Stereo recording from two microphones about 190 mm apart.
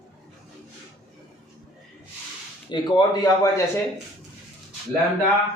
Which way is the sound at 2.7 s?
20° left (ahead or behind).